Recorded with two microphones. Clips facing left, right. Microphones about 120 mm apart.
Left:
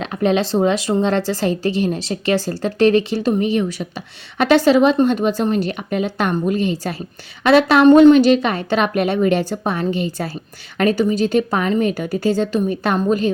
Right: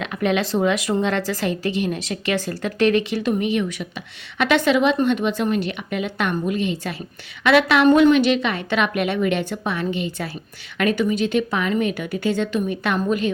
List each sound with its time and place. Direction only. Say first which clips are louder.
0.0 s a woman's voice: left 4 dB; 35° left (ahead or behind)